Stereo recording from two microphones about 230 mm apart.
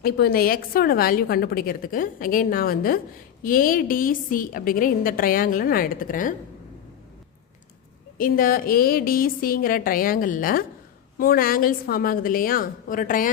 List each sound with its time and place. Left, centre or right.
0.0 s a woman's voice: left
8.2 s a woman's voice: left